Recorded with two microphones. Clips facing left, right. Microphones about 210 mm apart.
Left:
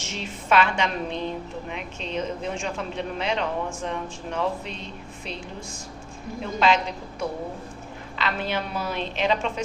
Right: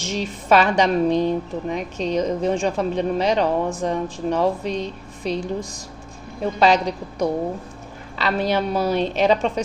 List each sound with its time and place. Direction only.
0.0 s a woman's voice: 35° right (ahead or behind)